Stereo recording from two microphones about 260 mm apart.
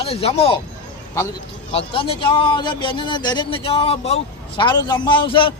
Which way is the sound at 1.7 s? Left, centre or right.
Left.